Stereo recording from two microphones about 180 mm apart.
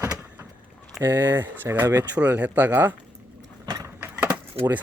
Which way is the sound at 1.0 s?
10° right (ahead or behind).